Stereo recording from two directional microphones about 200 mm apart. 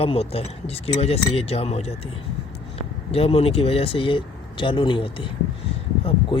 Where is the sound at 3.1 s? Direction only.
30° left (ahead or behind).